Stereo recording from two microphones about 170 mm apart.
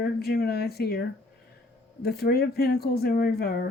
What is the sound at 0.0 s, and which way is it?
Speech, 65° left (ahead or behind).